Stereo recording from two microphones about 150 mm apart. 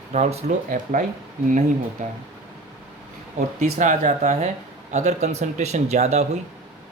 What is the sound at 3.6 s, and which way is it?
Speech, 55° right (ahead or behind).